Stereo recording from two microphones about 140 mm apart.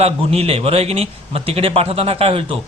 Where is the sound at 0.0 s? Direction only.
45° right (ahead or behind).